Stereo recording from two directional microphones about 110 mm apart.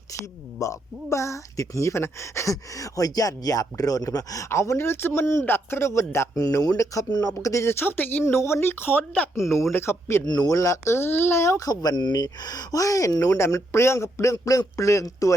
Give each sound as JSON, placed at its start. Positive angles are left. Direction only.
{"t": 0.6, "sound": "speech", "side_deg": 30}
{"t": 10.2, "sound": "speech", "side_deg": 35}